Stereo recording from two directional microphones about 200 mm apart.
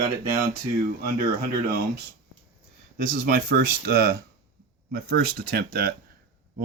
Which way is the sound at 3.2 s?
45° right (ahead or behind).